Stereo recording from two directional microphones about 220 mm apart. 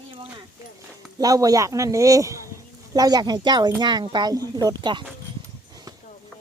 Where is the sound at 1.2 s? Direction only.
15° right (ahead or behind).